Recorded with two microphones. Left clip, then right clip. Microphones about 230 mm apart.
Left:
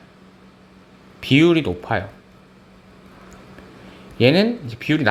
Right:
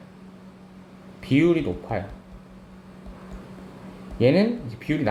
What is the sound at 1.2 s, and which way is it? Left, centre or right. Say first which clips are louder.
Speech: left 5 dB; left.